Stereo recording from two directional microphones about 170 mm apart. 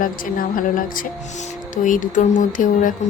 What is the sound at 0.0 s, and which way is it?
A woman's voice, 55° left (ahead or behind).